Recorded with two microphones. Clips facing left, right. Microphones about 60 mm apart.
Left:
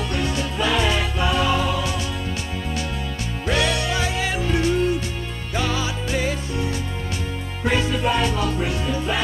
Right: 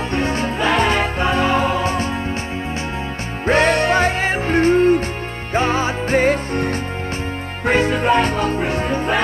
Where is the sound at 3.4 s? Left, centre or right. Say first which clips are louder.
Right 7 dB; right.